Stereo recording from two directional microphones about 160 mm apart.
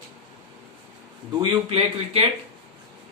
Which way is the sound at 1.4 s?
35° right (ahead or behind).